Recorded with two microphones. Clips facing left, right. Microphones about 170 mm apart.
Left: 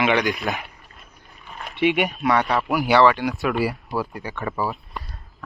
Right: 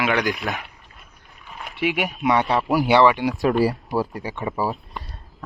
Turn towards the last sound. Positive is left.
turn(degrees=-30)  # may be behind; listen again after turning